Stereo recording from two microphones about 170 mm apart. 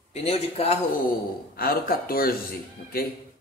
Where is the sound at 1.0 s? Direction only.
60° left (ahead or behind).